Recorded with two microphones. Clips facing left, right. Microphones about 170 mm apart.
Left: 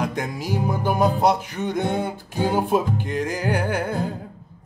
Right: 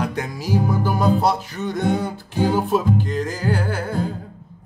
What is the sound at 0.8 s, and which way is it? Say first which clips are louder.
Music: left 3 dB; 15° left (ahead or behind).